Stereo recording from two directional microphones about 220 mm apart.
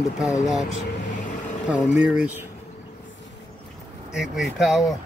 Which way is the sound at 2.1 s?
5° right (ahead or behind).